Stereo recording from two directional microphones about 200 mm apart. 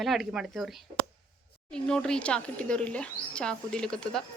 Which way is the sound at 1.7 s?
5° left (ahead or behind).